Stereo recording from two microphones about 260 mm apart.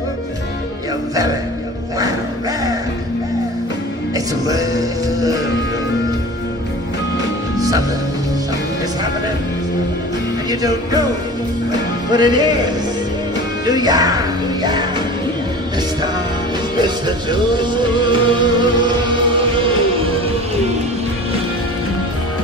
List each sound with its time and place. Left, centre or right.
7.5 s music: centre
10.5 s music: centre
12.1 s music: centre
13.7 s music: centre
16.7 s music: centre